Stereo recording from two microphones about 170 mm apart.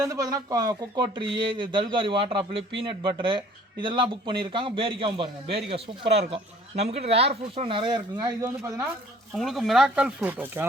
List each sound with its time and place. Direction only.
0.0 s speech: 20° right (ahead or behind)
9.3 s speech: centre (ahead or behind)